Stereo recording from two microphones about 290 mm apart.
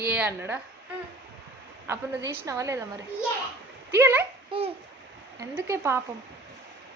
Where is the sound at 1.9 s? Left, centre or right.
Centre.